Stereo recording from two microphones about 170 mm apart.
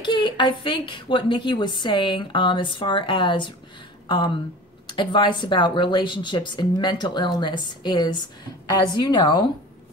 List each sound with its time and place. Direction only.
0.0 s speech: 25° left (ahead or behind)
4.8 s speech: 30° left (ahead or behind)